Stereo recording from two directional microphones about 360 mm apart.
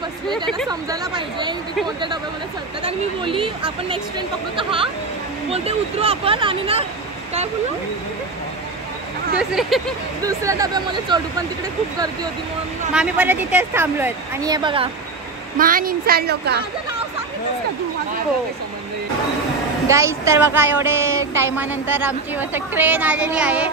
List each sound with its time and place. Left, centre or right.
0.7 s speech: centre
2.8 s speech: centre
9.4 s a woman's voice: centre
12.9 s a woman's voice: centre; by 16.5 s right
19.9 s a woman's voice: centre